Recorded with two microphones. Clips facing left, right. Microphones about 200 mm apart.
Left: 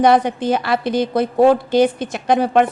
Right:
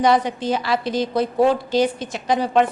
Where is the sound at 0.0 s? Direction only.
55° left (ahead or behind).